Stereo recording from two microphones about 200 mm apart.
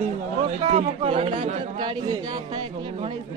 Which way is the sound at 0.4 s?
30° right (ahead or behind).